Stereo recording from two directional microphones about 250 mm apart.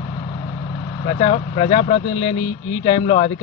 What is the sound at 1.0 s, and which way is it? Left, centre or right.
Speech, left.